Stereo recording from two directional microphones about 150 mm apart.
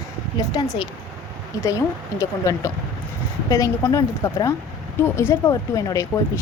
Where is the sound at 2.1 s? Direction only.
20° left (ahead or behind).